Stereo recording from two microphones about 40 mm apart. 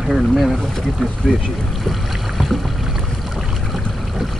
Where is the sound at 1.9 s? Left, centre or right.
Centre.